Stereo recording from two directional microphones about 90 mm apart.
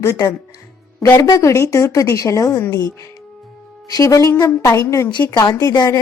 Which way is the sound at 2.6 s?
20° left (ahead or behind).